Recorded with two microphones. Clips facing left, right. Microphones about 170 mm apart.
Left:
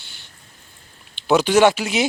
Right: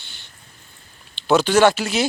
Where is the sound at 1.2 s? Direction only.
15° left (ahead or behind).